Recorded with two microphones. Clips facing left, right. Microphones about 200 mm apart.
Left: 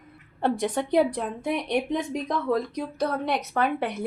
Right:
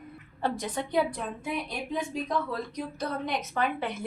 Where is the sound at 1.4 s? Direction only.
75° left (ahead or behind).